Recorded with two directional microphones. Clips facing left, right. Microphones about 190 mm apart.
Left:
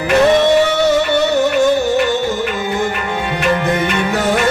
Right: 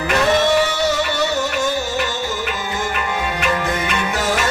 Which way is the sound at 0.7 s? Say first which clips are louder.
Left 7 dB; 60° left (ahead or behind).